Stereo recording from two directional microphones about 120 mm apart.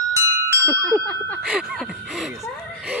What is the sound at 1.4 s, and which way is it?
Speech, 5° right (ahead or behind).